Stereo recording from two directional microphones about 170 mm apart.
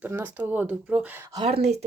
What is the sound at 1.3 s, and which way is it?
Speech, 35° right (ahead or behind).